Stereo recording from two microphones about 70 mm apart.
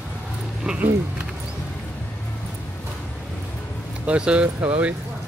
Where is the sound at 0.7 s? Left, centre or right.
Centre.